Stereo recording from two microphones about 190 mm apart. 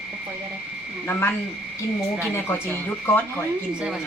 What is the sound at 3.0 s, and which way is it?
Speech, 10° left (ahead or behind).